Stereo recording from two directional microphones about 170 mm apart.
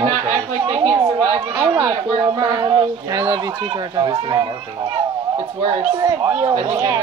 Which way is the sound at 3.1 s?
15° right (ahead or behind).